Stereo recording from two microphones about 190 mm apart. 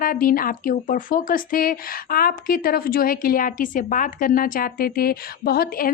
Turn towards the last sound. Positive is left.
turn(degrees=50)  # may be behind; listen again after turning